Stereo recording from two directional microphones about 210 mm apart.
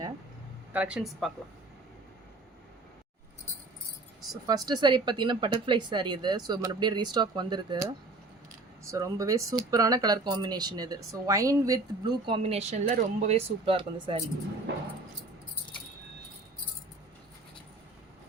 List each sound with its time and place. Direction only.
0.7 s speech: 5° right (ahead or behind)
4.4 s speech: 20° right (ahead or behind)
12.2 s speech: 25° right (ahead or behind)
14.7 s dog: 55° right (ahead or behind)